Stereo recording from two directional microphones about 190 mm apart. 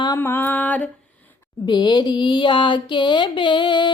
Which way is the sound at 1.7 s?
25° left (ahead or behind).